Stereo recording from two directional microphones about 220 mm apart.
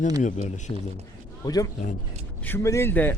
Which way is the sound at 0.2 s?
35° left (ahead or behind).